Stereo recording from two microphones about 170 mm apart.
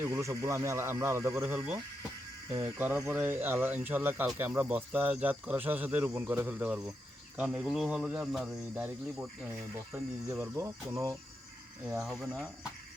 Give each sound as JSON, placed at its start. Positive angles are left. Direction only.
{"t": 0.0, "sound": "speech", "side_deg": -20}
{"t": 9.9, "sound": "speech", "side_deg": -15}
{"t": 11.9, "sound": "speech", "side_deg": 0}